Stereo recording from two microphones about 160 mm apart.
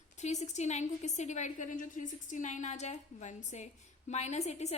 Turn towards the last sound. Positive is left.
turn(degrees=45)  # may be behind; listen again after turning